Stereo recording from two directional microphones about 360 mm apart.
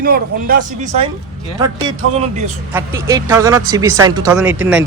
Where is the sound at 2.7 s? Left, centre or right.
Centre.